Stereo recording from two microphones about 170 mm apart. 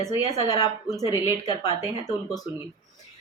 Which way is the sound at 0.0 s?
20° left (ahead or behind).